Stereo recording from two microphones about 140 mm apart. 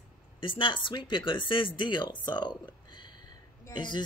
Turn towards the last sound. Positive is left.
turn(degrees=30)  # may be behind; listen again after turning